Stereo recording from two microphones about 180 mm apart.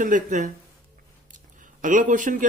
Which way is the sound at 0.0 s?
45° right (ahead or behind).